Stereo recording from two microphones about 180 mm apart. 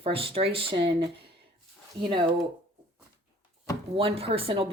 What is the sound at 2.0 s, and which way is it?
Speech, 25° right (ahead or behind).